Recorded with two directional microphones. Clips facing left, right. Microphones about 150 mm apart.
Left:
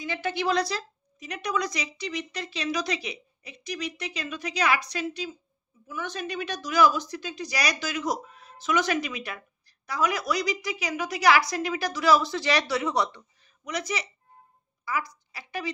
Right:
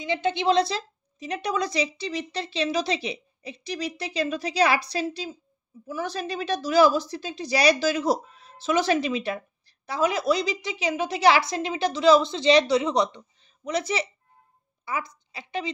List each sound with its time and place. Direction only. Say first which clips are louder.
0.0 s a woman's voice: right 4 dB; 20° right (ahead or behind)